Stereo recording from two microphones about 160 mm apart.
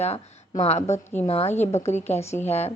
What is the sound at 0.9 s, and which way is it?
Speech, 10° left (ahead or behind).